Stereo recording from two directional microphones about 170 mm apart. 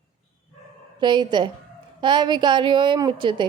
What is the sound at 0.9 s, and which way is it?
Speech, 25° right (ahead or behind).